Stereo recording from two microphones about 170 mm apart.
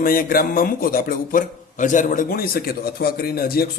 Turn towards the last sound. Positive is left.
turn(degrees=60)  # may be behind; listen again after turning